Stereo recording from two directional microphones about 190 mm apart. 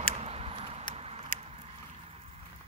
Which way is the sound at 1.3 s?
40° left (ahead or behind).